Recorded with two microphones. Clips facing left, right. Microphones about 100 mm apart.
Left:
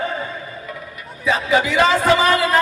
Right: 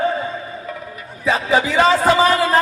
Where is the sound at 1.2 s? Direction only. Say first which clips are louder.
Right 1 dB; 35° right (ahead or behind).